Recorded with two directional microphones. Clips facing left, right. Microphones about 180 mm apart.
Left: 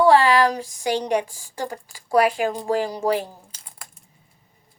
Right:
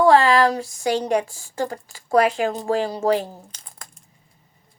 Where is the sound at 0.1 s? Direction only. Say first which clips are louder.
Right 1 dB; 40° right (ahead or behind).